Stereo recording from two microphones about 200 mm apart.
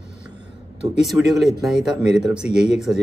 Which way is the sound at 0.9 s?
Centre (ahead or behind).